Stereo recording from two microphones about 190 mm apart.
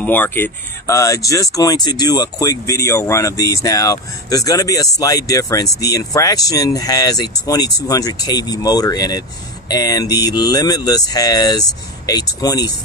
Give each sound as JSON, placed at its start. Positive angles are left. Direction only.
{"t": 0.0, "sound": "speech", "side_deg": 10}